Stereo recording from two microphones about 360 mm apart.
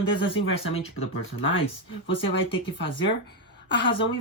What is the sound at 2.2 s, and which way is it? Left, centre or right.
Speech, centre.